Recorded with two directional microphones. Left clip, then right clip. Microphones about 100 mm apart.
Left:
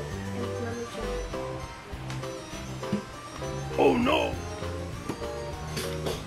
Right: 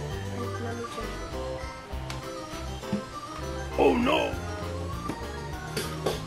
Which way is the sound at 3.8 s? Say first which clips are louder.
Even; centre (ahead or behind).